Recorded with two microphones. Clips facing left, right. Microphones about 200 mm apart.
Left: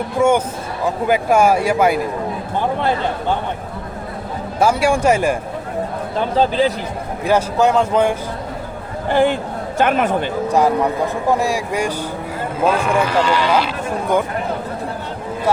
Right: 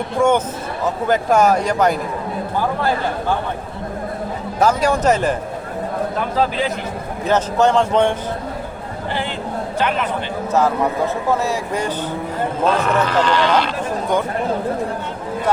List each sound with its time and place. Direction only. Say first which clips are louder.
0.2 s speech: left 1 dB; 10° left (ahead or behind)
4.6 s speech: left 1 dB; 10° left (ahead or behind)
6.1 s speech: left 6 dB; 30° left (ahead or behind)
7.3 s speech: left 1 dB; 10° left (ahead or behind)
9.0 s speech: left 9 dB; 50° left (ahead or behind)
10.5 s speech: left 1 dB; 15° left (ahead or behind)